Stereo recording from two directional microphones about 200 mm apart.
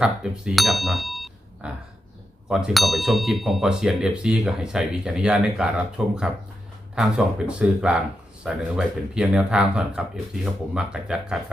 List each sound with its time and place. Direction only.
0.0 s speech: 5° right (ahead or behind)